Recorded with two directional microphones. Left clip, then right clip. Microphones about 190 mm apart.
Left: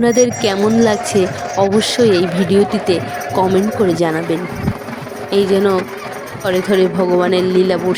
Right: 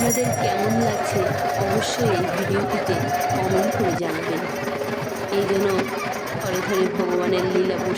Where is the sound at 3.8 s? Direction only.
45° left (ahead or behind).